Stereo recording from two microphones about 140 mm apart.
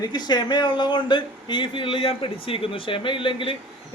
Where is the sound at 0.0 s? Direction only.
30° left (ahead or behind).